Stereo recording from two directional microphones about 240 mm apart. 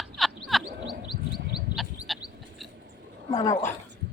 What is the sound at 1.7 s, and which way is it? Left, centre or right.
Bird, centre.